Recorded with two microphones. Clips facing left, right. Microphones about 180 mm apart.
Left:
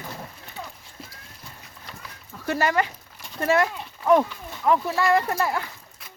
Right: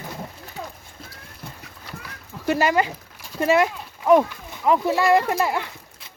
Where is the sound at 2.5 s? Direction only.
20° right (ahead or behind).